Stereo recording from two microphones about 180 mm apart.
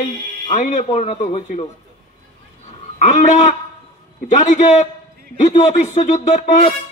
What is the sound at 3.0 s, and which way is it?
A man's voice, 40° left (ahead or behind).